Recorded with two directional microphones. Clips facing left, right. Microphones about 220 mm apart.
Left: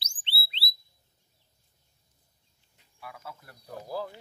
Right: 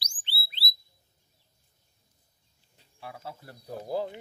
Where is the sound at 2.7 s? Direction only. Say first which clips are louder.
Right 3 dB; 30° right (ahead or behind).